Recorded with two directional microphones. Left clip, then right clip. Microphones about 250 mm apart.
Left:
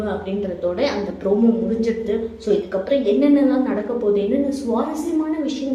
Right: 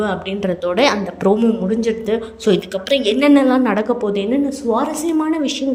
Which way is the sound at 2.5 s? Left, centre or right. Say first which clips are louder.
Right 3 dB; right.